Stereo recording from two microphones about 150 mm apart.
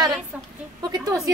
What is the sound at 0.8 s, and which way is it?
Speech, 25° right (ahead or behind).